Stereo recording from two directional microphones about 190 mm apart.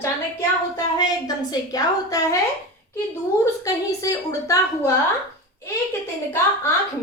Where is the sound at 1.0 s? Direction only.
20° left (ahead or behind).